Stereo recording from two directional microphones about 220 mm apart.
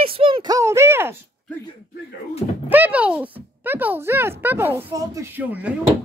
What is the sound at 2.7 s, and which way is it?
Speech, 5° right (ahead or behind).